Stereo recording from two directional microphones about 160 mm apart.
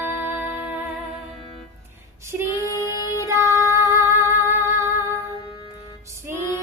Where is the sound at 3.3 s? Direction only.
15° right (ahead or behind).